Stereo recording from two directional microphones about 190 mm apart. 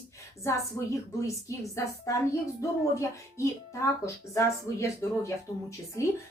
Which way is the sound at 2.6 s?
15° left (ahead or behind).